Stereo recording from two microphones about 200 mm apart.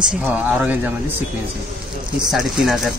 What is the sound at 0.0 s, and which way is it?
Speech, 5° right (ahead or behind).